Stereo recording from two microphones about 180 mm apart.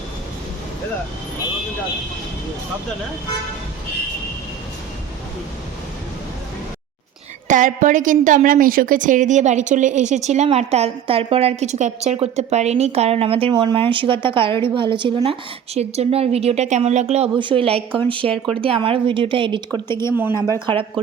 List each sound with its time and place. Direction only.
7.4 s a woman's voice: 45° right (ahead or behind); by 19.8 s 25° right (ahead or behind)
19.9 s a woman's voice: 15° left (ahead or behind)
20.7 s a woman's voice: 25° right (ahead or behind)